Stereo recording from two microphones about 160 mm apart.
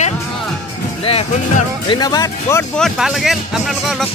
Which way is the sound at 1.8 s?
25° left (ahead or behind).